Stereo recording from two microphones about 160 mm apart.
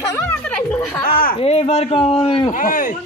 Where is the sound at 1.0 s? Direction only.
65° left (ahead or behind).